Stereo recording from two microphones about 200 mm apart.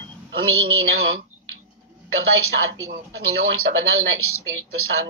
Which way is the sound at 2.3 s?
90° right.